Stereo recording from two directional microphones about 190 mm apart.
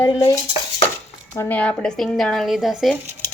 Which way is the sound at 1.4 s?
10° left (ahead or behind).